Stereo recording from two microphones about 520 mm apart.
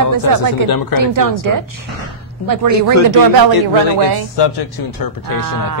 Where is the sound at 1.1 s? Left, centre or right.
Right.